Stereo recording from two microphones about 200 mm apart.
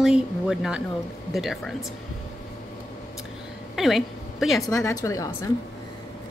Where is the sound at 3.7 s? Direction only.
Centre (ahead or behind).